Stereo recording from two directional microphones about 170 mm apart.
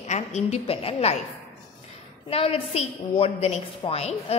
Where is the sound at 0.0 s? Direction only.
40° left (ahead or behind).